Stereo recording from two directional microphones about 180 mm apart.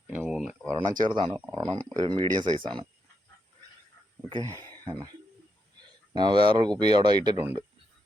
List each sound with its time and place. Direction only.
0.1 s a sound: 5° right (ahead or behind)
0.7 s speech: 20° right (ahead or behind)
4.3 s speech: 25° right (ahead or behind)
6.1 s speech: 25° right (ahead or behind)